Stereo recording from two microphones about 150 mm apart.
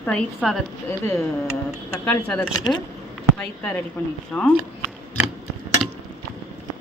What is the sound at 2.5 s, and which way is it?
Speech, 30° left (ahead or behind).